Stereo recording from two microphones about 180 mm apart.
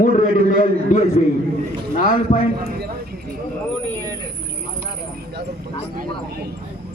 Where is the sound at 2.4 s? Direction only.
55° right (ahead or behind).